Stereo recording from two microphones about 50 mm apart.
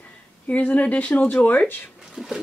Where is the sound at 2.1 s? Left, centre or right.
Centre.